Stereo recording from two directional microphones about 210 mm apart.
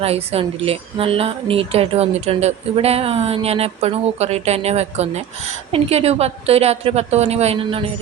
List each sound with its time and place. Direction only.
0.0 s a woman's voice: 30° right (ahead or behind)